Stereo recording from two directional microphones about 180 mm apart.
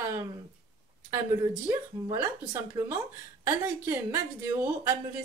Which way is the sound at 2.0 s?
20° right (ahead or behind).